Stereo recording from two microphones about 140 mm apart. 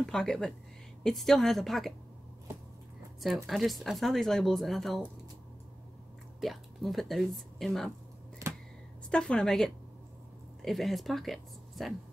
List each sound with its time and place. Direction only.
0.0 s speech: centre (ahead or behind)
3.4 s speech: centre (ahead or behind)
6.4 s speech: centre (ahead or behind)
8.4 s a sound: 20° right (ahead or behind)
9.1 s speech: 5° left (ahead or behind)